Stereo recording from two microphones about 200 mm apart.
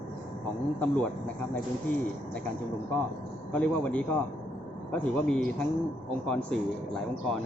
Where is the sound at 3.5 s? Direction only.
5° left (ahead or behind).